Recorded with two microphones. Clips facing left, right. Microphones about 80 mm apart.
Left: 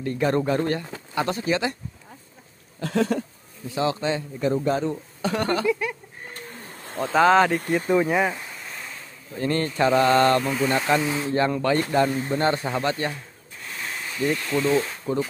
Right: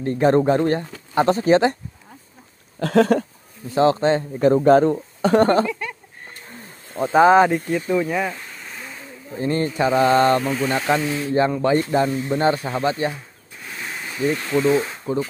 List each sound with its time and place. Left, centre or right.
0.0 s speech: right
2.8 s speech: right
3.7 s speech: right
5.7 s a sound: centre
7.0 s mantra: centre
7.9 s speech: centre
8.5 s a sound: centre
9.3 s mantra: centre
10.2 s speech: centre
11.1 s speech: centre
11.3 s speech: centre
12.6 s mantra: centre
14.0 s speech: centre